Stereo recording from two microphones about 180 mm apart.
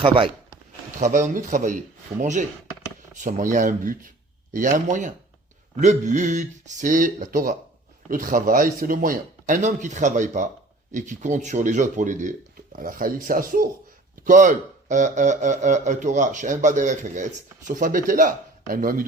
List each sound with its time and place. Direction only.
0.0 s speech: 30° right (ahead or behind)
0.9 s speech: 45° right (ahead or behind)
3.2 s speech: 45° right (ahead or behind)